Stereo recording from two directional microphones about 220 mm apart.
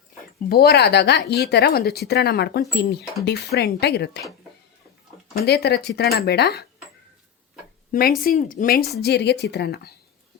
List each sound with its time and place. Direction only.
0.4 s speech: 45° left (ahead or behind)
5.4 s speech: 45° left (ahead or behind)
8.2 s speech: 40° left (ahead or behind)